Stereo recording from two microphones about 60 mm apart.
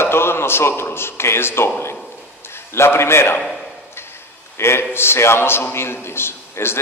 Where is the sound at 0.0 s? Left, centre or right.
Left.